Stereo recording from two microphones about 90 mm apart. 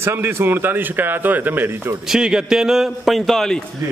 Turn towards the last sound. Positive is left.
turn(degrees=5)  # may be behind; listen again after turning